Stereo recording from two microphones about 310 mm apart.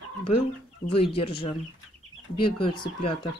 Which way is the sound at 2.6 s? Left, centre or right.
Centre.